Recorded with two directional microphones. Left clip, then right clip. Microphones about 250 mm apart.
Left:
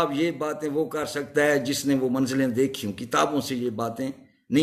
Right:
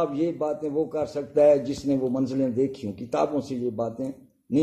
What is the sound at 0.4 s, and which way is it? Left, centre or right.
A man's voice, left.